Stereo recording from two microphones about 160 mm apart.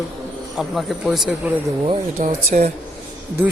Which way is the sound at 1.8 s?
40° right (ahead or behind).